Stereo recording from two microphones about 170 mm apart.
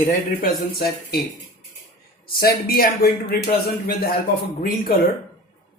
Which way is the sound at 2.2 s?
65° left (ahead or behind).